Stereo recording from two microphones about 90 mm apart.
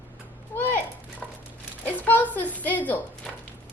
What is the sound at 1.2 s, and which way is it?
Dog, centre (ahead or behind).